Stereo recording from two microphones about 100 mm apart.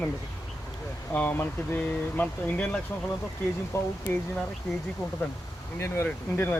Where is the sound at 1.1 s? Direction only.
15° left (ahead or behind).